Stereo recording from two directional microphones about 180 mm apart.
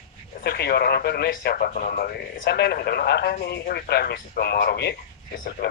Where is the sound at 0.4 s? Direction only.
60° left (ahead or behind).